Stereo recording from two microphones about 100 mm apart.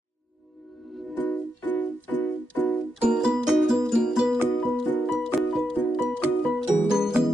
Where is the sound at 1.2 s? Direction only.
15° left (ahead or behind).